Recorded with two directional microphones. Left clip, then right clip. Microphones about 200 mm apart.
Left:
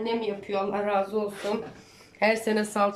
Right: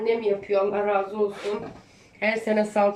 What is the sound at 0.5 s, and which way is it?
Speech, 35° left (ahead or behind).